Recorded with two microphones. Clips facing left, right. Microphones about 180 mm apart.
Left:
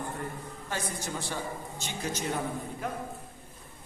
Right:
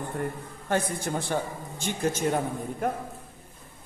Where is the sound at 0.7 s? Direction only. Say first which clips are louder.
Right 8 dB; 55° right (ahead or behind).